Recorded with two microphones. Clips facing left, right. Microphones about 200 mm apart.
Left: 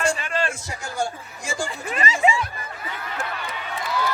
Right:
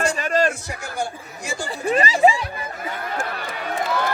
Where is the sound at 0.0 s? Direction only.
40° right (ahead or behind).